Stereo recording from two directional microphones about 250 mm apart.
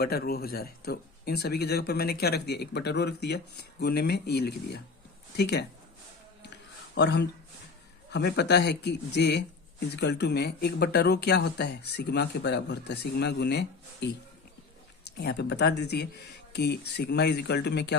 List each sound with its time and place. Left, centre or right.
0.0 s speech: left
6.9 s speech: left